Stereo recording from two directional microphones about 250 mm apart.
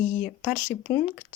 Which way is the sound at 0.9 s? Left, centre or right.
Left.